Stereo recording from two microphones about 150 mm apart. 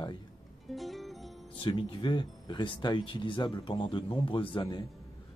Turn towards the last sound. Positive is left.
turn(degrees=30)  # may be behind; listen again after turning